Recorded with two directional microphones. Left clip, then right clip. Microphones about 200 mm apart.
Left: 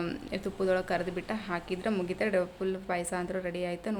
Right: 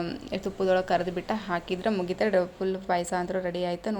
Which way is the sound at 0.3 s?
Centre (ahead or behind).